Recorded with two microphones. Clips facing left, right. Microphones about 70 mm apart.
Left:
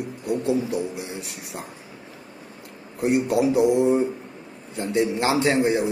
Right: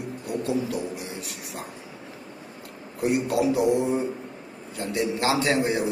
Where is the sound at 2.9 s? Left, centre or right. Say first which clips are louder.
Left 3 dB; left.